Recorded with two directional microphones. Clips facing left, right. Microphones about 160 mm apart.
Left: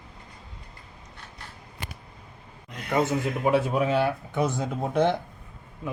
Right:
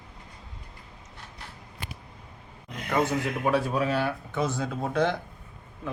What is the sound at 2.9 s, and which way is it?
Speech, 15° left (ahead or behind).